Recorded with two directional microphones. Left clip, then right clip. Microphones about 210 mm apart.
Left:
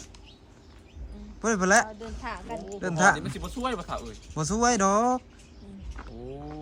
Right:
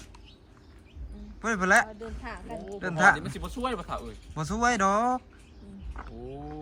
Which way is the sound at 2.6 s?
5° left (ahead or behind).